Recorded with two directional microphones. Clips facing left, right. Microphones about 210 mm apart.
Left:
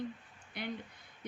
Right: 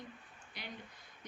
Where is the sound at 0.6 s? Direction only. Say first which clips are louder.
Left 9 dB; 55° left (ahead or behind).